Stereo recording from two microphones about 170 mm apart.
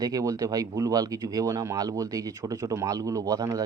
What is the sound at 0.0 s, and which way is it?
Speech, 20° right (ahead or behind).